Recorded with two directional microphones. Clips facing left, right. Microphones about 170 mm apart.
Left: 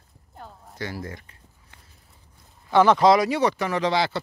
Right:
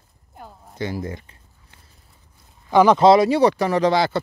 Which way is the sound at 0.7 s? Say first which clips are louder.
Right 6 dB; 20° right (ahead or behind).